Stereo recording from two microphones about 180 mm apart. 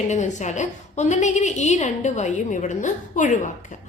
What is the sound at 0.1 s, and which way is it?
A woman's voice, 40° left (ahead or behind).